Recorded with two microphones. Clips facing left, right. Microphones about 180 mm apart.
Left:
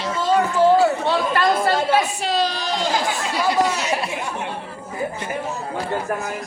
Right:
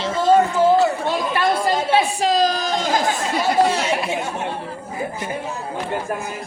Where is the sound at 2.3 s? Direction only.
40° right (ahead or behind).